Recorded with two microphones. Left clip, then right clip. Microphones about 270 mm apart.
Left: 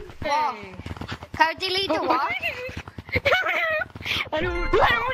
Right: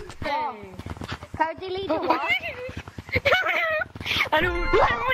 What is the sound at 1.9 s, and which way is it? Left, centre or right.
Speech, centre.